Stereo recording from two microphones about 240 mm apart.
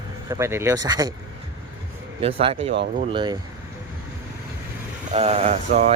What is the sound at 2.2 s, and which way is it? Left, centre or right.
Speech, right.